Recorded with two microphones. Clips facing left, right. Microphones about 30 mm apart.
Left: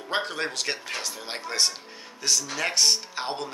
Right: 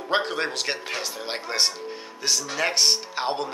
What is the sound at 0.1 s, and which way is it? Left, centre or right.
Speech, centre.